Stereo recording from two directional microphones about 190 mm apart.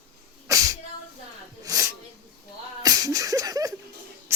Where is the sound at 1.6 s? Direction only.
15° right (ahead or behind).